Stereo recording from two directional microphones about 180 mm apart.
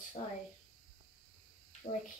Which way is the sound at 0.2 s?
35° left (ahead or behind).